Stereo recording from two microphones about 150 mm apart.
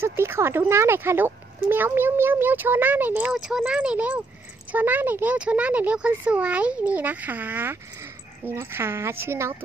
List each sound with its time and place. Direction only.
0.0 s speech: 15° right (ahead or behind)